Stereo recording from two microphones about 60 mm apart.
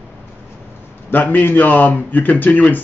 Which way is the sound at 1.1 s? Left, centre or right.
Left.